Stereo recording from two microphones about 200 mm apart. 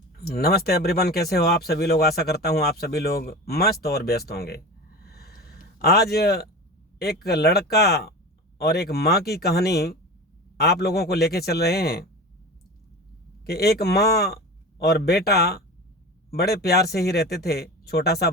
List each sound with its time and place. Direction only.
0.2 s speech: 50° left (ahead or behind)
5.0 s a sound: 50° left (ahead or behind)
7.0 s speech: 50° left (ahead or behind)
13.4 s speech: 50° left (ahead or behind)